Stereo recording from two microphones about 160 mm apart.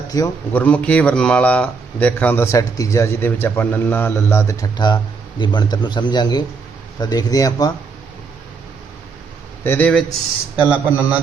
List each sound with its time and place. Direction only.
0.1 s a man's voice: 20° left (ahead or behind)
0.5 s a man's voice: 10° left (ahead or behind)
9.6 s speech: 10° left (ahead or behind)
10.6 s a man's voice: 10° right (ahead or behind)